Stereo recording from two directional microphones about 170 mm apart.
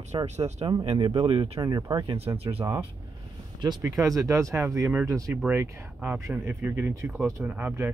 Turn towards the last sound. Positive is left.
turn(degrees=-10)  # may be behind; listen again after turning